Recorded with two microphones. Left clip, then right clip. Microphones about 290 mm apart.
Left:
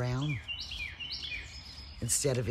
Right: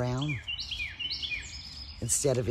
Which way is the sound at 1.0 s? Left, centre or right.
Right.